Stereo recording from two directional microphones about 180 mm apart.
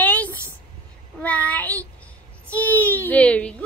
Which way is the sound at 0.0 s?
10° left (ahead or behind).